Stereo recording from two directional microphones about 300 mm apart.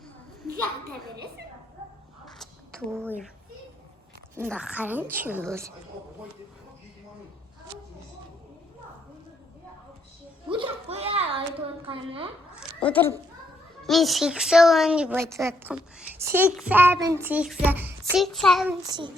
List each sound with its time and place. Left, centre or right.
2.9 s a woman's voice: centre
4.4 s a woman's voice: centre
10.5 s a sound: centre
11.9 s a woman's voice: centre
12.5 s a sound: centre
13.8 s a woman's voice: centre
18.8 s a woman's voice: centre